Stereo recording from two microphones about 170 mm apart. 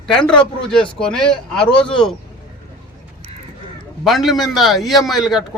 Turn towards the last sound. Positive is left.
turn(degrees=0)  # may be behind; listen again after turning